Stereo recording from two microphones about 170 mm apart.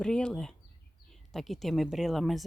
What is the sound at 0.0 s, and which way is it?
Speech, 5° left (ahead or behind).